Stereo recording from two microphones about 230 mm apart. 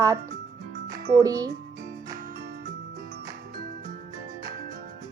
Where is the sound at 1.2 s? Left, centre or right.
Centre.